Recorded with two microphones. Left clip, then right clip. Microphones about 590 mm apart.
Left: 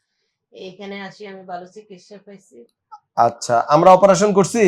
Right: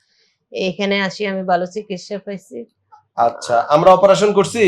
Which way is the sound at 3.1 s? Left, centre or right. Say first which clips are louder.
Even; left.